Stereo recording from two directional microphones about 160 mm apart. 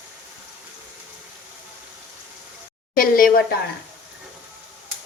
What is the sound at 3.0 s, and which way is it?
Speech, 60° left (ahead or behind).